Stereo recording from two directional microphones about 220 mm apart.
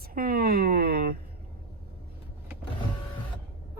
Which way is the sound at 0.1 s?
45° right (ahead or behind).